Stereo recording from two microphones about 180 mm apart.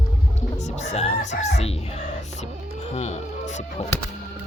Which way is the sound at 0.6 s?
40° left (ahead or behind).